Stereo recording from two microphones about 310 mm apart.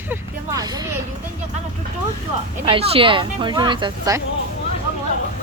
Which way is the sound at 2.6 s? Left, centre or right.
Centre.